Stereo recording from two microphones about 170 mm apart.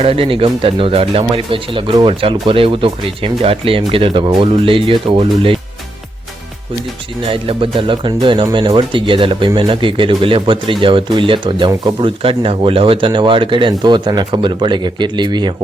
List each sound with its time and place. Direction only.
0.0 s speech: 35° right (ahead or behind)
7.3 s speech: 30° right (ahead or behind)